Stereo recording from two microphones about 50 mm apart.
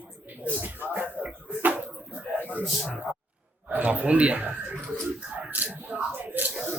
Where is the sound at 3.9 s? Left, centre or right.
Right.